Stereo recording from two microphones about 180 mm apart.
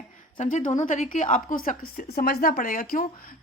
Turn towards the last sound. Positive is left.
turn(degrees=50)  # may be behind; listen again after turning